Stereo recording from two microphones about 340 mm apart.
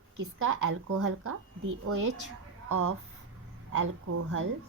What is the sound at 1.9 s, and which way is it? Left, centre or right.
Speech, right.